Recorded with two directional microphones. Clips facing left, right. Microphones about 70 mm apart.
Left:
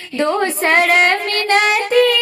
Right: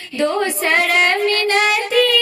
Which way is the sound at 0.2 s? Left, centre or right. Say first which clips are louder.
Left 1 dB; left.